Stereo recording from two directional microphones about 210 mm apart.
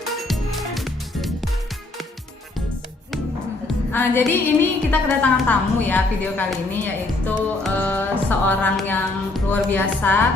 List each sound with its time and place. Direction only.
0.0 s music: centre (ahead or behind)
3.7 s a woman's voice: 5° left (ahead or behind)